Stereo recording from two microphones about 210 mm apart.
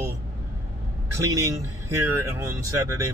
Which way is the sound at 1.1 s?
15° right (ahead or behind).